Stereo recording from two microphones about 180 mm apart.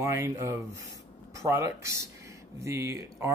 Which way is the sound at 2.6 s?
15° right (ahead or behind).